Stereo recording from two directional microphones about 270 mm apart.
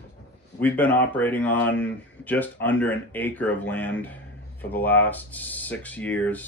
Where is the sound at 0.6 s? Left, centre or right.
Centre.